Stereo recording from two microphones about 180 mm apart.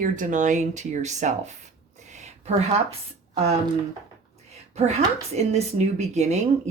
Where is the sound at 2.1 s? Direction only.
40° right (ahead or behind).